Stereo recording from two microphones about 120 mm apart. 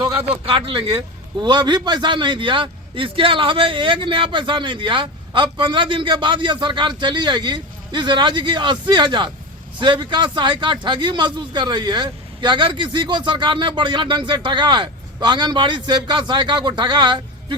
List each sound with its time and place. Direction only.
0.1 s a man's voice: 50° right (ahead or behind)